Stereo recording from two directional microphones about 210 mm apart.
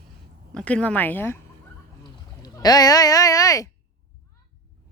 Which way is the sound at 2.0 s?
15° left (ahead or behind).